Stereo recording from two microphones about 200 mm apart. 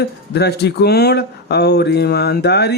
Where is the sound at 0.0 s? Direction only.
55° left (ahead or behind).